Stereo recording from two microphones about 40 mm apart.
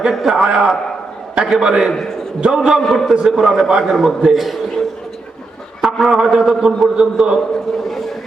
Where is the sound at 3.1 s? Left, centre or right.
Centre.